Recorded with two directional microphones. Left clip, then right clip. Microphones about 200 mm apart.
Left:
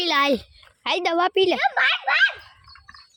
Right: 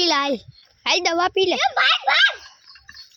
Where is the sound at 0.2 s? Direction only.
5° left (ahead or behind).